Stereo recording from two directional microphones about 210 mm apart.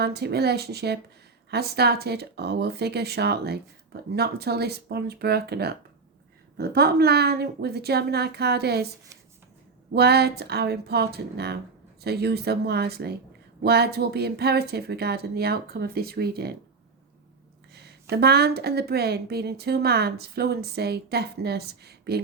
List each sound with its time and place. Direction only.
0.0 s a woman's voice: 50° right (ahead or behind)
9.9 s a woman's voice: 50° right (ahead or behind)
18.1 s a woman's voice: 50° right (ahead or behind)